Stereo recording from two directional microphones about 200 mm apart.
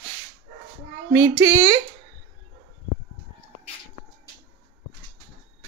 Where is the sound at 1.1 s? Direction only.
15° right (ahead or behind).